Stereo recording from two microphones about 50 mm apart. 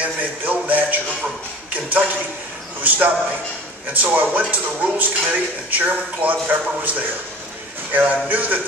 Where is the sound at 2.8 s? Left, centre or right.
Right.